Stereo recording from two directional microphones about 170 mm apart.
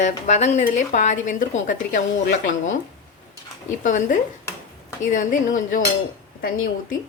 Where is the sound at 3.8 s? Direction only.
50° left (ahead or behind).